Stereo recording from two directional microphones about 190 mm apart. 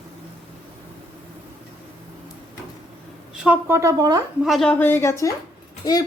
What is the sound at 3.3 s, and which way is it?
Speech, 5° right (ahead or behind).